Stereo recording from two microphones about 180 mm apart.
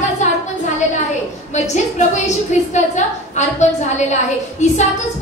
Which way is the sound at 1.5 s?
40° left (ahead or behind).